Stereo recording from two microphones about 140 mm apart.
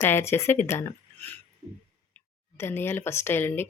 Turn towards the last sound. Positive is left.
turn(degrees=15)  # may be behind; listen again after turning